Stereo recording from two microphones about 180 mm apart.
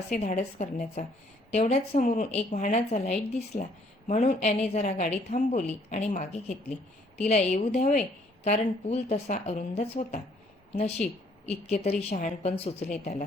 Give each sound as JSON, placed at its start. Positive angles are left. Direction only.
{"t": 0.1, "sound": "speech", "side_deg": 40}
{"t": 7.3, "sound": "speech", "side_deg": 40}